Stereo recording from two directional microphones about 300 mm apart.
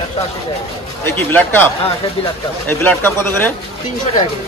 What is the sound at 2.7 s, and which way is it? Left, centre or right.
Speech, centre.